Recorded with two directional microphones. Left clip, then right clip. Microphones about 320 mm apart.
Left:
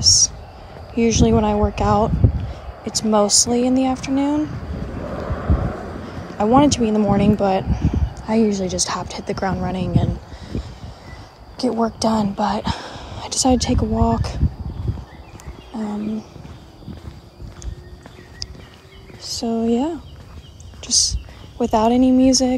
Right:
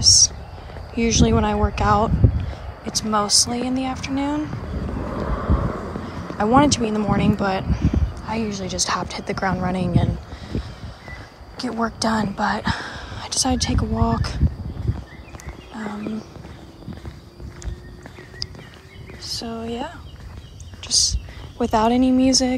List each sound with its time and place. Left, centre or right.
0.0 s a sound: centre
0.9 s speech: centre
5.0 s vehicle: centre
6.3 s speech: centre
15.8 s speech: centre
18.4 s a sound: centre
19.4 s speech: centre